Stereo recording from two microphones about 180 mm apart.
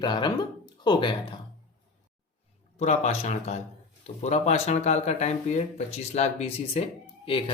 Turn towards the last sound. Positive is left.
turn(degrees=30)  # may be behind; listen again after turning